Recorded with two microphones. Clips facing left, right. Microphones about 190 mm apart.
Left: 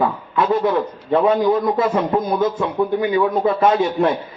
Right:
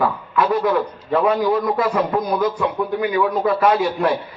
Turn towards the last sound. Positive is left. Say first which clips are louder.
# left 1 dB
turn(degrees=25)  # may be behind; listen again after turning